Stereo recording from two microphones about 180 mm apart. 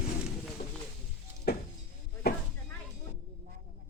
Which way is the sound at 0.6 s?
60° left (ahead or behind).